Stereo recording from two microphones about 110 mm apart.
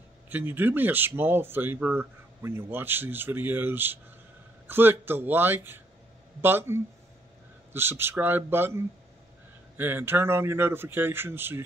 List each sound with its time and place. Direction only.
0.3 s speech: 20° right (ahead or behind)